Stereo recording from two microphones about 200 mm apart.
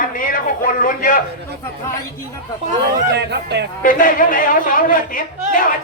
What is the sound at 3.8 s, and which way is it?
Speech, 40° left (ahead or behind).